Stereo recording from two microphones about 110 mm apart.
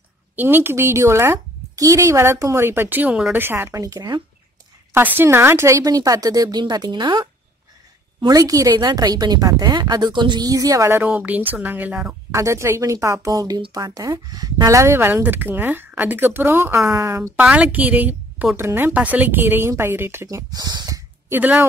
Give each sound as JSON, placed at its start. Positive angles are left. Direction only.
{"t": 0.4, "sound": "speech", "side_deg": -20}
{"t": 4.9, "sound": "a woman's voice", "side_deg": -20}
{"t": 11.0, "sound": "speech", "side_deg": -15}
{"t": 12.3, "sound": "speech", "side_deg": -30}
{"t": 17.4, "sound": "speech", "side_deg": -15}
{"t": 21.3, "sound": "speech", "side_deg": -15}